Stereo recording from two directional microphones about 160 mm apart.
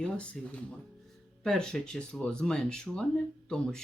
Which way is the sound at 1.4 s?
5° left (ahead or behind).